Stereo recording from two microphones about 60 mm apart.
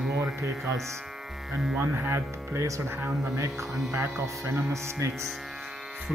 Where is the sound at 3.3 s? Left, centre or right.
Right.